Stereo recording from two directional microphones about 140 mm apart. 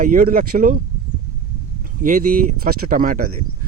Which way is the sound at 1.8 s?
75° right (ahead or behind).